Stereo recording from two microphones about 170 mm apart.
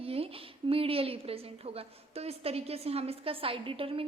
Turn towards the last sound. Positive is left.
turn(degrees=-30)  # may be behind; listen again after turning